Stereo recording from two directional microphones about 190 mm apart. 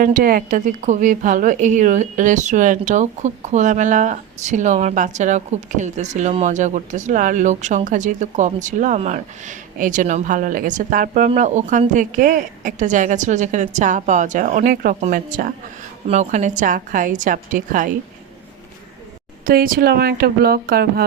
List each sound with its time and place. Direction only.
0.0 s a woman's voice: 50° right (ahead or behind)
19.5 s a woman's voice: 50° right (ahead or behind)